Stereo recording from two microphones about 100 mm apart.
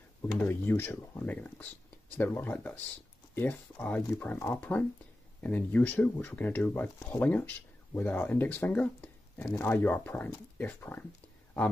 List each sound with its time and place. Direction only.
0.5 s speech: 25° left (ahead or behind)